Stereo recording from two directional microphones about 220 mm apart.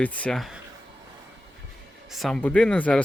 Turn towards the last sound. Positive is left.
turn(degrees=5)  # may be behind; listen again after turning